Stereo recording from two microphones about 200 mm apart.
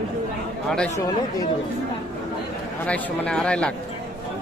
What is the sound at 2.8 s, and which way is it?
Speech, 5° left (ahead or behind).